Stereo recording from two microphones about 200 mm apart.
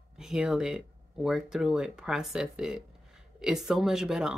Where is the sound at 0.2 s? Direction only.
5° right (ahead or behind).